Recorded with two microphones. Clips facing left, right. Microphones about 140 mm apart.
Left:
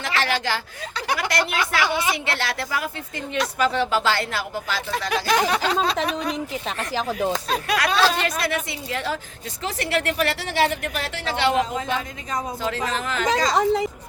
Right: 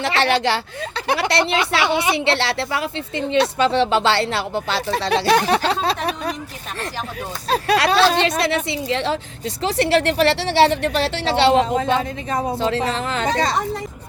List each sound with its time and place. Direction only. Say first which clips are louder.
0.0 s speech: right 6 dB; 30° right (ahead or behind)
7.5 s speech: right 11 dB; 30° right (ahead or behind)